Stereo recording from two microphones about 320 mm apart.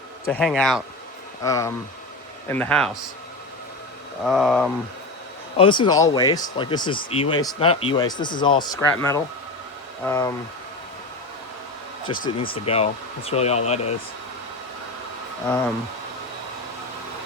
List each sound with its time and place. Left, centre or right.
0.3 s speech: centre
4.3 s speech: centre
5.5 s speech: centre
12.0 s speech: centre
15.4 s speech: centre